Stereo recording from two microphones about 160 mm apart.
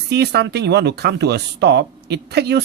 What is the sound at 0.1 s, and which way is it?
Speech, 90° right.